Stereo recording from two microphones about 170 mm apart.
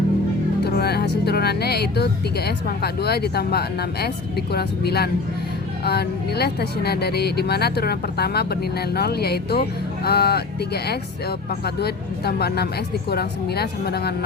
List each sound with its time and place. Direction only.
0.6 s speech: 70° left (ahead or behind)